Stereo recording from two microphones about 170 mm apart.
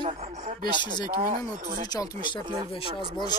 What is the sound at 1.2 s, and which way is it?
Speech, 50° right (ahead or behind).